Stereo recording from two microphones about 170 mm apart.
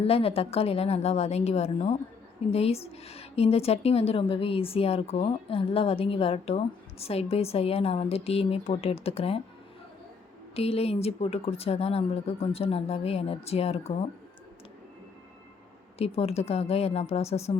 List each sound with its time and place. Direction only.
0.0 s speech: 35° left (ahead or behind)
10.5 s speech: 35° left (ahead or behind)
16.0 s speech: 35° left (ahead or behind)